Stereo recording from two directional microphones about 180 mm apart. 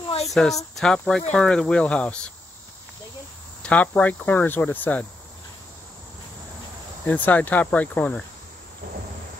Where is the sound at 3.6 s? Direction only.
10° left (ahead or behind).